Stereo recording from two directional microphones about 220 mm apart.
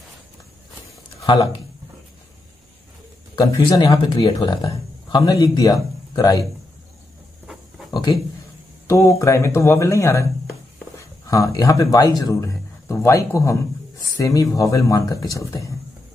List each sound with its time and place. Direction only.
1.2 s speech: 20° left (ahead or behind)
3.3 s a man's voice: 20° left (ahead or behind)
7.9 s a sound: 20° left (ahead or behind)
8.8 s speech: 15° left (ahead or behind)
11.2 s speech: 15° left (ahead or behind)